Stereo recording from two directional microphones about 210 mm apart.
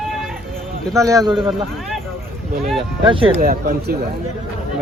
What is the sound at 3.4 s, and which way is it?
Speech, 45° right (ahead or behind).